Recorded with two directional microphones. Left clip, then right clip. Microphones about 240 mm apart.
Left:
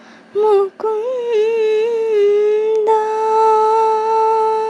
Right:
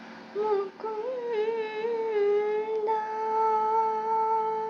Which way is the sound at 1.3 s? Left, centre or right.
Left.